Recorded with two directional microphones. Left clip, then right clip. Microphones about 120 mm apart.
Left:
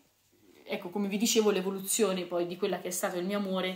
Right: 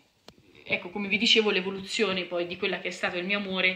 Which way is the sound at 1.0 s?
85° left.